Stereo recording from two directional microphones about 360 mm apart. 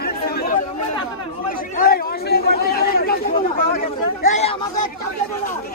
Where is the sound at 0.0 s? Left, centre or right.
Left.